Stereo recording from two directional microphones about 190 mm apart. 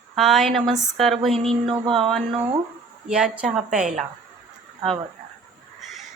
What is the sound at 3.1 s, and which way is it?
Speech, 5° right (ahead or behind).